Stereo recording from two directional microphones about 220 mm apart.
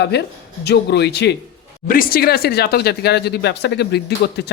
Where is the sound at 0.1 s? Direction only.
50° left (ahead or behind).